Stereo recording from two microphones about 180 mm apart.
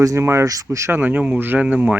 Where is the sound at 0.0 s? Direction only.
15° right (ahead or behind).